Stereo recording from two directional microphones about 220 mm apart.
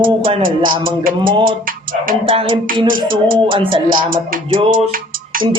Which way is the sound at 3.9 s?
40° right (ahead or behind).